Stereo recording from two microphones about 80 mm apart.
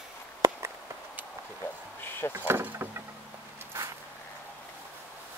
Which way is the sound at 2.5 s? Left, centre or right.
Right.